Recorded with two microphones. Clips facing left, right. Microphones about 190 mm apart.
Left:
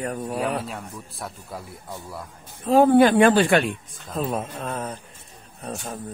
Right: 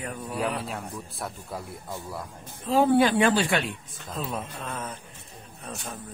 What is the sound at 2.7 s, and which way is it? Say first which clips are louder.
Speech: left 5 dB; 50° left (ahead or behind).